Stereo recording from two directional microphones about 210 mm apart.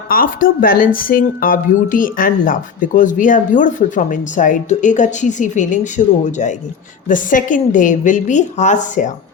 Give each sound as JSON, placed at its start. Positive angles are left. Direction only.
{"t": 0.1, "sound": "speech", "side_deg": 40}